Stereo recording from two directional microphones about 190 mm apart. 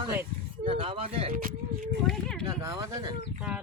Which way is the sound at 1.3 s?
45° right (ahead or behind).